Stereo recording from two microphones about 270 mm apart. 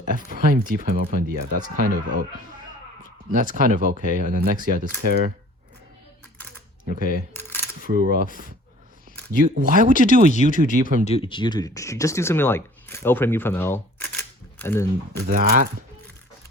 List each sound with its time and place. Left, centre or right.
0.0 s speech: right
3.2 s speech: right
7.3 s a sound: centre
7.6 s a sound: right
9.6 s speech: right
10.2 s speech: left
10.6 s speech: right
11.0 s speech: left
15.3 s speech: right